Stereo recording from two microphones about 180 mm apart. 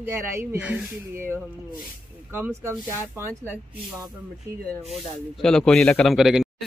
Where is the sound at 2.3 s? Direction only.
15° right (ahead or behind).